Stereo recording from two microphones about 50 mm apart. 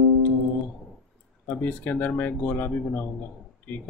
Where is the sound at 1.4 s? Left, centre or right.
Left.